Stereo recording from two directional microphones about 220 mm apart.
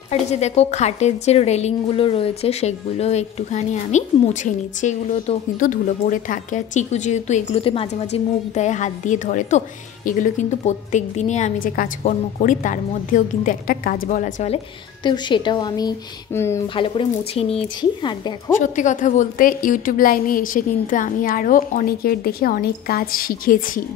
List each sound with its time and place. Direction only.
0.1 s a woman's voice: 30° left (ahead or behind)
15.0 s speech: 20° left (ahead or behind)
16.6 s speech: 25° left (ahead or behind)
18.6 s a woman's voice: 35° left (ahead or behind)